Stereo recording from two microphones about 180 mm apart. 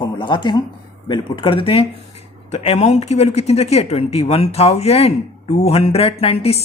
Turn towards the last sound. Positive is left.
turn(degrees=35)  # may be behind; listen again after turning